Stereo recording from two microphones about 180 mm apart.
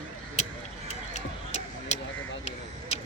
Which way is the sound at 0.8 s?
40° left (ahead or behind).